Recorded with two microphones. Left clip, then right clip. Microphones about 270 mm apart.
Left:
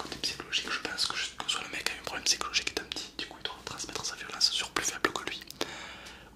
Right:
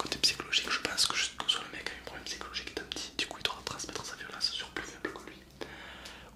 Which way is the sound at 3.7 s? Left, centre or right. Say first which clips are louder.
Left 3 dB; centre.